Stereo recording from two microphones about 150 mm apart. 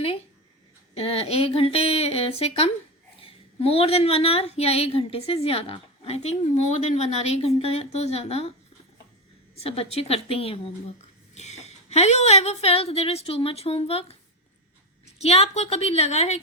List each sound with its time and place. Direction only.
0.9 s a woman's voice: 40° left (ahead or behind)
9.6 s a woman's voice: 40° left (ahead or behind)